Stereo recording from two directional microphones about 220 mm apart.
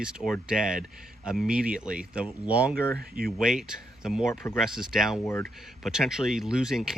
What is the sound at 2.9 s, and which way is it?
Speech, 40° right (ahead or behind).